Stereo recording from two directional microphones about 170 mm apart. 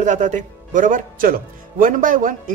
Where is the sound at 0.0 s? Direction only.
45° right (ahead or behind).